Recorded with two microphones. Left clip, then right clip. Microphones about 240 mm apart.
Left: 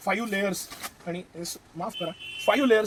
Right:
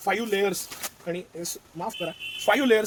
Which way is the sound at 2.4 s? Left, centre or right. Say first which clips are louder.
Even; right.